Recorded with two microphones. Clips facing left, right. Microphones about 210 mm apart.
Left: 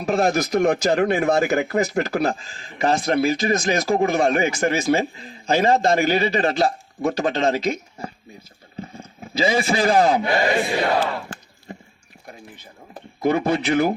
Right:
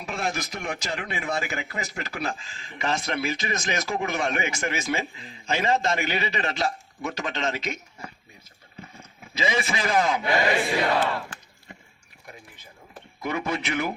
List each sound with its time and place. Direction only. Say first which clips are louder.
0.0 s a man's voice: left 11 dB; 40° left (ahead or behind)
13.2 s a man's voice: left 9 dB; 35° left (ahead or behind)